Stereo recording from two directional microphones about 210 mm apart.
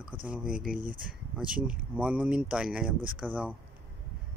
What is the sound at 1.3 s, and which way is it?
Speech, 5° right (ahead or behind).